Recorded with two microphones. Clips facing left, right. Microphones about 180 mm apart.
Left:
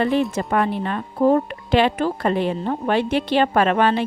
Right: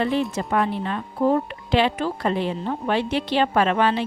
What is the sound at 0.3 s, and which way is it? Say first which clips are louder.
A woman's voice: left 2 dB; 50° left (ahead or behind).